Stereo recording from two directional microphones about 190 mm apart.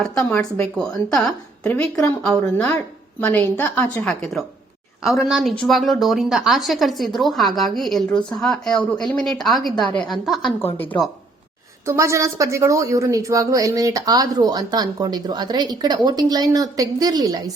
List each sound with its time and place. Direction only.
0.3 s a woman's voice: 10° left (ahead or behind)
11.9 s a woman's voice: 15° right (ahead or behind)